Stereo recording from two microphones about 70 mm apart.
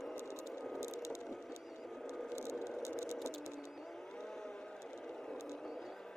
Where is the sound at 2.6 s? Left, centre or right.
Left.